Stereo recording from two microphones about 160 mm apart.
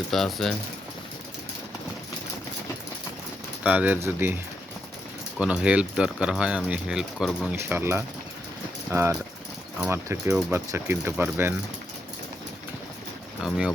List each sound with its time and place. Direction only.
0.1 s speech: centre (ahead or behind)
3.6 s speech: 10° right (ahead or behind)
5.4 s speech: 10° right (ahead or behind)
13.4 s speech: 5° right (ahead or behind)